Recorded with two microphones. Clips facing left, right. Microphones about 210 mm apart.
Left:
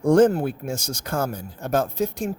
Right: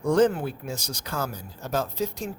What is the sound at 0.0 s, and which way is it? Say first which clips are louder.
Speech: left 5 dB; 45° left (ahead or behind).